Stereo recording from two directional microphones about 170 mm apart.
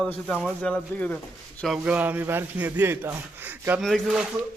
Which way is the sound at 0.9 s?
10° left (ahead or behind).